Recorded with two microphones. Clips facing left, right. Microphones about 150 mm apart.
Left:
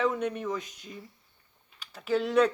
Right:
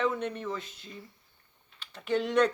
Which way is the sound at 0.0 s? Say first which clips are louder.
Left 2 dB; 10° left (ahead or behind).